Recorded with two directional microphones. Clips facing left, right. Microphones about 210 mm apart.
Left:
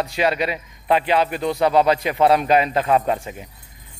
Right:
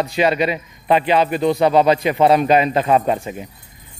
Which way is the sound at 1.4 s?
15° right (ahead or behind).